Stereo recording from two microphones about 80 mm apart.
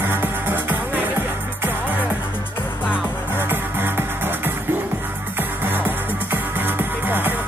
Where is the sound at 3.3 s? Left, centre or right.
Right.